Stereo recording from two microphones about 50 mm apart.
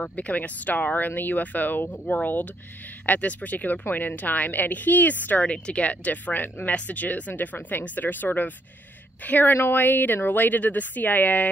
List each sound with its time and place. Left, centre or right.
0.0 s speech: left
3.1 s speech: left
5.4 s speech: left
9.5 s speech: left